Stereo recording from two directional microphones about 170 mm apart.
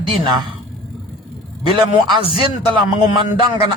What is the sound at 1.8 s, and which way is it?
Speech, 25° right (ahead or behind).